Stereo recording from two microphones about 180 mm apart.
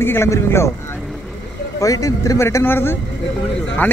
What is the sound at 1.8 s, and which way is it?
Speech, 20° left (ahead or behind).